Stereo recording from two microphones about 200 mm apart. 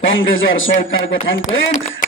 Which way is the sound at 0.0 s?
70° left (ahead or behind).